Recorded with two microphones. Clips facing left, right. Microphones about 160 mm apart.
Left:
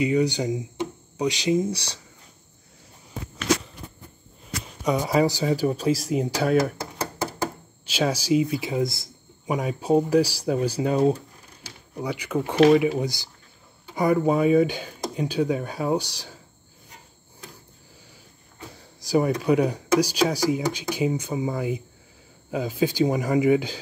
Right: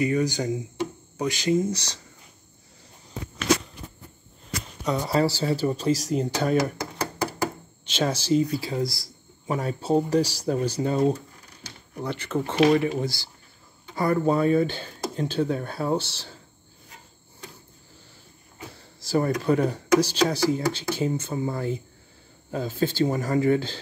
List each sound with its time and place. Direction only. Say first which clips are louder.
0.0 s speech: left 2 dB; 15° left (ahead or behind)
4.8 s speech: left 2 dB; 10° left (ahead or behind)
7.8 s speech: left 1 dB; 10° left (ahead or behind)
8.6 s speech: left 2 dB; 20° left (ahead or behind)
18.8 s a sound: left 2 dB; 10° left (ahead or behind)
19.4 s speech: left 2 dB; 10° left (ahead or behind)